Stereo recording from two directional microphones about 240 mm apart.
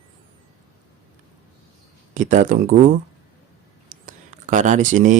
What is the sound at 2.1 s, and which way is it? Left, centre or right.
Speech, right.